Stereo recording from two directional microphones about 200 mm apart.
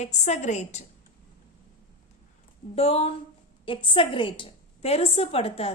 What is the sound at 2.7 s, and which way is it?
A woman's voice, 30° left (ahead or behind).